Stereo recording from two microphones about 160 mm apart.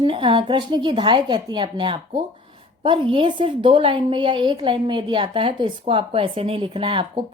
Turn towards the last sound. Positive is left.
turn(degrees=-30)  # may be behind; listen again after turning